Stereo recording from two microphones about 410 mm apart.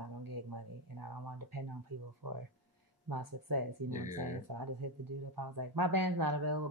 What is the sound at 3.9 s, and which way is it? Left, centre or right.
Speech, centre.